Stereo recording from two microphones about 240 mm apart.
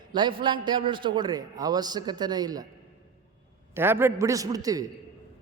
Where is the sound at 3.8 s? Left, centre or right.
Centre.